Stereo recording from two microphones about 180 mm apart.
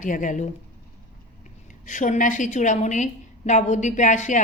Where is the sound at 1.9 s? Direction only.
45° left (ahead or behind).